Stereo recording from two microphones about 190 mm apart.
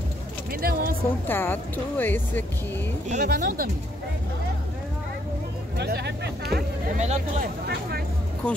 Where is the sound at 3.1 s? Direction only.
45° right (ahead or behind).